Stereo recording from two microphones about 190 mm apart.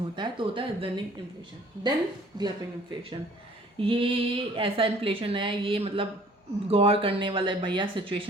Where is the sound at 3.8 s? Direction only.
30° right (ahead or behind).